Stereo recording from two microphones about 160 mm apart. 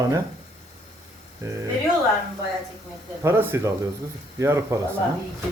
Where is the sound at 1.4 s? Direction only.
20° right (ahead or behind).